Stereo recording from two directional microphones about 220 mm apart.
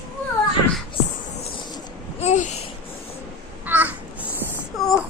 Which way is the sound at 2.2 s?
30° left (ahead or behind).